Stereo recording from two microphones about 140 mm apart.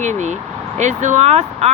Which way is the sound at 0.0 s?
60° right (ahead or behind).